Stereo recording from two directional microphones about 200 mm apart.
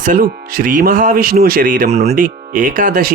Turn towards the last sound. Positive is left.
turn(degrees=-45)  # may be behind; listen again after turning